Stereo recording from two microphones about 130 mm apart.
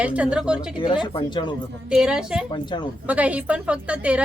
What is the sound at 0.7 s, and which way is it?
Speech, 35° left (ahead or behind).